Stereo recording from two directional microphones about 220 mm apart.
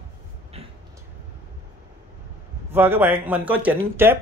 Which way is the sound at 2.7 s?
10° right (ahead or behind).